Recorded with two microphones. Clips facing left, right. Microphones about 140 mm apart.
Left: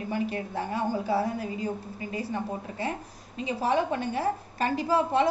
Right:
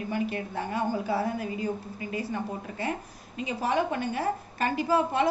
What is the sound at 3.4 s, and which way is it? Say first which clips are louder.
A woman's voice: left 1 dB; 30° left (ahead or behind).